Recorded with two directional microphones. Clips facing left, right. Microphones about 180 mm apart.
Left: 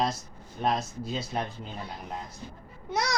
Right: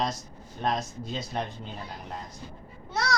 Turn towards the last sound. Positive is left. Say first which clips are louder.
# even
turn(degrees=20)  # may be behind; listen again after turning